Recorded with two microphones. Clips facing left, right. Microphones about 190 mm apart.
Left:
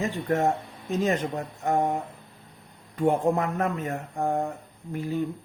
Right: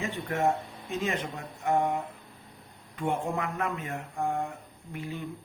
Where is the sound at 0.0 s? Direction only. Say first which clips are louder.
Left 4 dB; 40° left (ahead or behind).